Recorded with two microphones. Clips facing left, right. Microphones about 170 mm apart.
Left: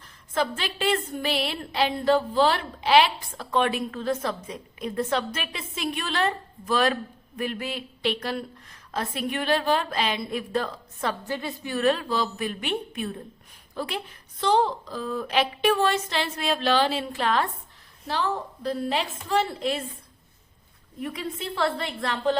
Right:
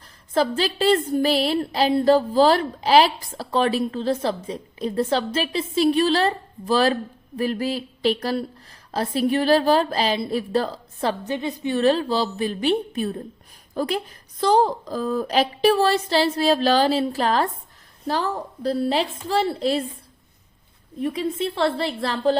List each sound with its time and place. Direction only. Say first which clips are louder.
0.3 s a woman's voice: right 6 dB; 35° right (ahead or behind)
11.3 s a woman's voice: right 6 dB; 20° right (ahead or behind)
21.0 s a woman's voice: right 8 dB; 25° right (ahead or behind)